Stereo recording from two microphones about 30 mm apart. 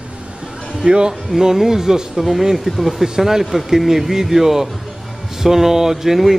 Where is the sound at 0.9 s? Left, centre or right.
Right.